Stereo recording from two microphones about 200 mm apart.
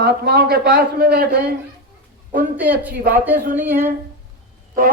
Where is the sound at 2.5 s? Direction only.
10° right (ahead or behind).